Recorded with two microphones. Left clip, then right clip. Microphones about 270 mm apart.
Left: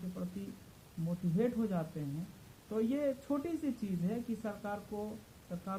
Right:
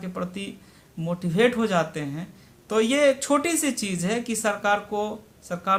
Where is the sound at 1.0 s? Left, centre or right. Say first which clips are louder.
Right 14 dB; centre.